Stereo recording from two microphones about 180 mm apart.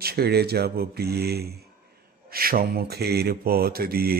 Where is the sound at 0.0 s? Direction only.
60° right (ahead or behind).